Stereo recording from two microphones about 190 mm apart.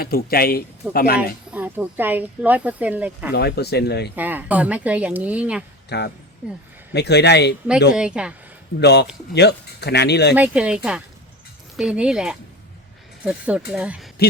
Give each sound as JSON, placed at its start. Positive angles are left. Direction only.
{"t": 0.0, "sound": "speech", "side_deg": 50}
{"t": 1.5, "sound": "speech", "side_deg": -10}
{"t": 3.3, "sound": "speech", "side_deg": 60}
{"t": 4.1, "sound": "speech", "side_deg": -10}
{"t": 5.9, "sound": "speech", "side_deg": 60}
{"t": 7.9, "sound": "speech", "side_deg": -5}
{"t": 8.8, "sound": "speech", "side_deg": 60}
{"t": 10.3, "sound": "speech", "side_deg": -5}